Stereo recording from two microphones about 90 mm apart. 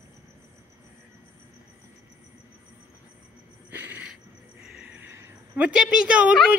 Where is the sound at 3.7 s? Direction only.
20° right (ahead or behind).